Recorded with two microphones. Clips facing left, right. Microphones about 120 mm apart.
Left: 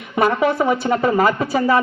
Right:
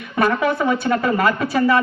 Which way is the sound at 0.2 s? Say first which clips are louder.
Left 2 dB; 20° left (ahead or behind).